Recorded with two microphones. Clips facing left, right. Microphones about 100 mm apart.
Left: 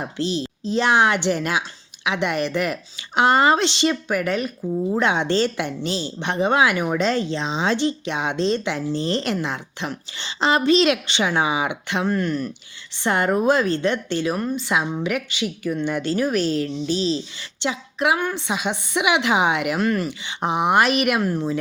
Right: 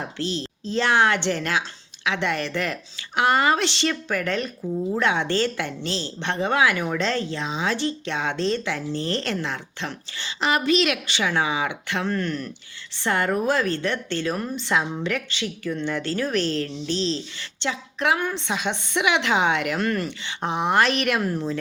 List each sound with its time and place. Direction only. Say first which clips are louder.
0.2 s a woman's voice: left 5 dB; 15° left (ahead or behind)
3.2 s speech: left 3 dB; 25° left (ahead or behind); by 4.5 s 10° left (ahead or behind)
4.9 s speech: left 2 dB; 20° left (ahead or behind)
10.2 s speech: left 4 dB; 30° left (ahead or behind)
14.3 s a woman's voice: left 2 dB; centre (ahead or behind)
20.2 s a woman's voice: left 4 dB; 15° left (ahead or behind)
21.2 s speech: left 3 dB; centre (ahead or behind)